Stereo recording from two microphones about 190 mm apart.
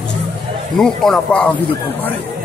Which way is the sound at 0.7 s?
Centre (ahead or behind).